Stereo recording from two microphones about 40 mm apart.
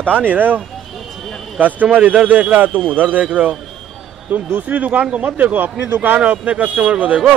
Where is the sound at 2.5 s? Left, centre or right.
Right.